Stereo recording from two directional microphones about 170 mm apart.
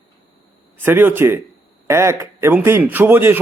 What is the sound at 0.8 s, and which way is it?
A man's voice, 15° right (ahead or behind).